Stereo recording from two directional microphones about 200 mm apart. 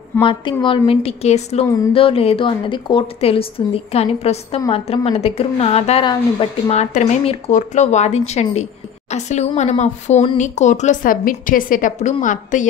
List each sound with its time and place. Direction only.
0.2 s a woman's voice: 25° left (ahead or behind); by 12.6 s 40° left (ahead or behind)